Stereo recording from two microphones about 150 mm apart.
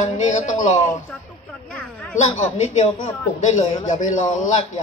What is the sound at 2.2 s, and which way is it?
A man's voice, 50° left (ahead or behind).